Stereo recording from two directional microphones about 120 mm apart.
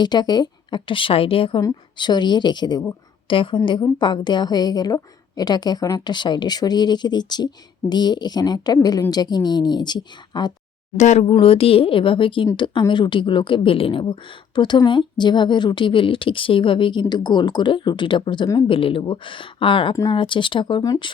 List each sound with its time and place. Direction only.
0.0 s a woman's voice: 35° left (ahead or behind)
1.6 s a woman's voice: 35° left (ahead or behind)
10.9 s a woman's voice: 75° left (ahead or behind); by 19.9 s 45° left (ahead or behind)
19.9 s a woman's voice: 30° left (ahead or behind)
20.1 s a woman's voice: 45° left (ahead or behind)